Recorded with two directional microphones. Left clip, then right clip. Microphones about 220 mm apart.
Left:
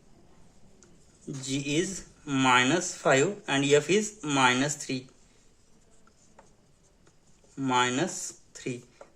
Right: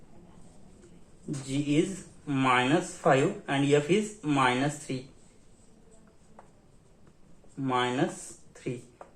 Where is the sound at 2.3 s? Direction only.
55° left (ahead or behind).